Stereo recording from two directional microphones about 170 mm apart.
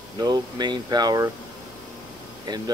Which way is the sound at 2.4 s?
25° right (ahead or behind).